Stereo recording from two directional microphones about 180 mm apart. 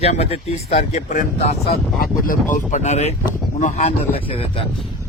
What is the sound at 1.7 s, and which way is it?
Speech, 55° left (ahead or behind).